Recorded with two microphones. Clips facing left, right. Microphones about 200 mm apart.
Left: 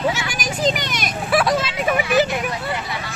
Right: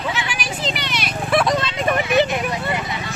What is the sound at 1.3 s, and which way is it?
Vehicle, 5° left (ahead or behind).